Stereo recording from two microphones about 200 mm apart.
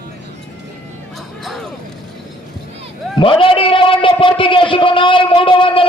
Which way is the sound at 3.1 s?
25° left (ahead or behind).